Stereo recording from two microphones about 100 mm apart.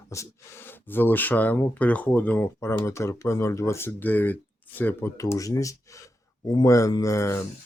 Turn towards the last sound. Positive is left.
turn(degrees=30)  # may be behind; listen again after turning